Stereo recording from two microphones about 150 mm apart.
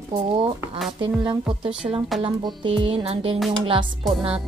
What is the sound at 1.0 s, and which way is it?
Music, 30° right (ahead or behind).